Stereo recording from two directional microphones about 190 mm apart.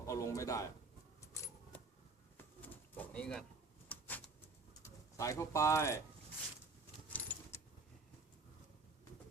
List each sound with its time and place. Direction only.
0.0 s a man's voice: 15° left (ahead or behind)
2.4 s pigeon: 10° left (ahead or behind)
3.8 s a sound: 10° left (ahead or behind)
5.1 s speech: 15° left (ahead or behind)
7.1 s keys jangling: 10° left (ahead or behind)